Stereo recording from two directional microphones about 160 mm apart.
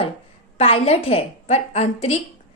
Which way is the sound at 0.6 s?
35° left (ahead or behind).